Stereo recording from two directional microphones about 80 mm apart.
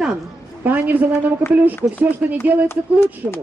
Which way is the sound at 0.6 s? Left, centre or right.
Right.